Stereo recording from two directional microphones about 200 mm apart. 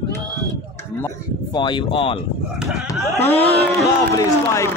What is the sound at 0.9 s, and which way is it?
Speech, 15° left (ahead or behind).